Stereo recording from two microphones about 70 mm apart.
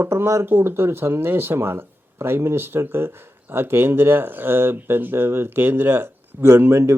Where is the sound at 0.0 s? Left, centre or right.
Right.